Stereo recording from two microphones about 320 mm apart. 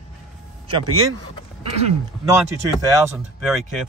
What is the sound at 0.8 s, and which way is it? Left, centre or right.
Speech, right.